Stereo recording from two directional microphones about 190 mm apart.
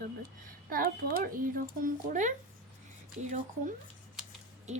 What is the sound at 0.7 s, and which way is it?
Speech, 45° right (ahead or behind).